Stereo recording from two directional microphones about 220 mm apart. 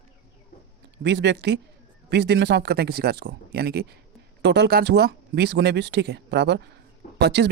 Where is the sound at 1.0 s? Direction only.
50° right (ahead or behind).